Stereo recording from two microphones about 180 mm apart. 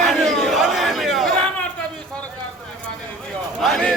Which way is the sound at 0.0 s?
Centre (ahead or behind).